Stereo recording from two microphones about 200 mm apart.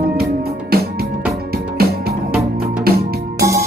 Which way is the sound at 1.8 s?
50° right (ahead or behind).